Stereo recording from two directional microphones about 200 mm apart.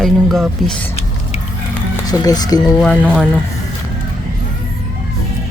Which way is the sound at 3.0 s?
5° right (ahead or behind).